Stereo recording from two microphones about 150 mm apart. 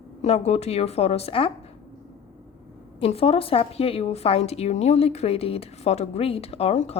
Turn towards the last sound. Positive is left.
turn(degrees=45)  # may be behind; listen again after turning